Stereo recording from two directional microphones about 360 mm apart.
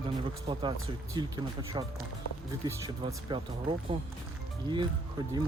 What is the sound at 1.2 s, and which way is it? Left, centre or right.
Speech, centre.